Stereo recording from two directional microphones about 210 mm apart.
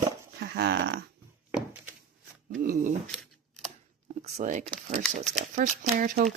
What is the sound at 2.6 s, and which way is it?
Speech, 40° right (ahead or behind).